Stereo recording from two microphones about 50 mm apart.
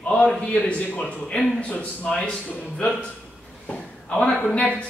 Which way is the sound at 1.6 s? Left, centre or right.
Left.